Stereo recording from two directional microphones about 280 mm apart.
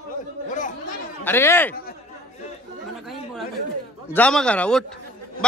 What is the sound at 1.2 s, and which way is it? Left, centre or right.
Speech, centre.